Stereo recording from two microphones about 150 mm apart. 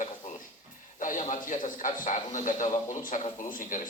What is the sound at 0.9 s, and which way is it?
A woman's voice, 60° left (ahead or behind).